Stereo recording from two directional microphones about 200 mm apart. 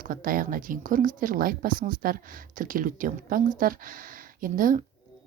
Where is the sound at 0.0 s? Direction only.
45° right (ahead or behind).